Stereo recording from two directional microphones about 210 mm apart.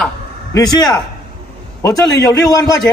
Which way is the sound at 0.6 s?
15° left (ahead or behind).